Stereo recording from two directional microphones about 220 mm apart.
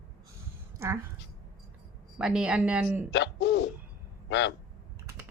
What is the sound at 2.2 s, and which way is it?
Speech, 5° right (ahead or behind).